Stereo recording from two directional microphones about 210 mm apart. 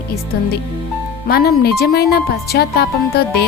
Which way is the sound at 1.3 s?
50° left (ahead or behind).